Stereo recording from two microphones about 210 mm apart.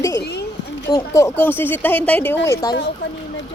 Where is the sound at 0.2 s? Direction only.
50° left (ahead or behind).